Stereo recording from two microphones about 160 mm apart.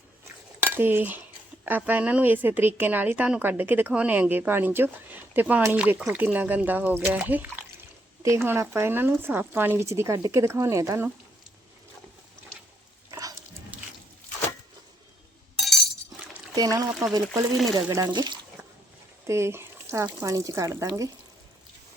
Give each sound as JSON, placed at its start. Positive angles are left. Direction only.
{"t": 0.6, "sound": "cutlery", "side_deg": -15}
{"t": 1.6, "sound": "a woman's voice", "side_deg": -10}
{"t": 13.1, "sound": "dog", "side_deg": -20}
{"t": 16.6, "sound": "speech", "side_deg": -20}
{"t": 19.3, "sound": "speech", "side_deg": -15}